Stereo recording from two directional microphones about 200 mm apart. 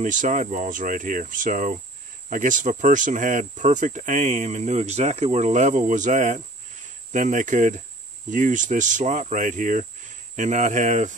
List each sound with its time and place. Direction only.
0.0 s speech: 40° right (ahead or behind)